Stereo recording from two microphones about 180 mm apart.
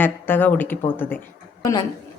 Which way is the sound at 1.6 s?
20° left (ahead or behind).